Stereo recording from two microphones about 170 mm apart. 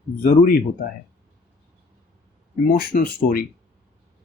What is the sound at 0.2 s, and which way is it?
Speech, 50° left (ahead or behind).